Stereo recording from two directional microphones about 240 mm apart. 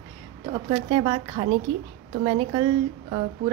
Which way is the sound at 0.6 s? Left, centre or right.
Centre.